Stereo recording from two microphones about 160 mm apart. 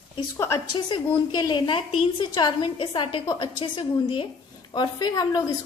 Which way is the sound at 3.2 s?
20° left (ahead or behind).